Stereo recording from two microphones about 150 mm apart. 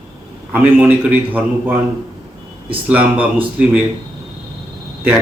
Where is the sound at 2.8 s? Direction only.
10° right (ahead or behind).